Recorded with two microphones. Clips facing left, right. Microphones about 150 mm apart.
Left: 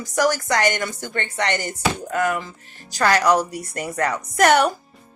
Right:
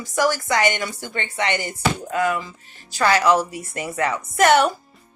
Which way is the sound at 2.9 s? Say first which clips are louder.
Even; 40° left (ahead or behind).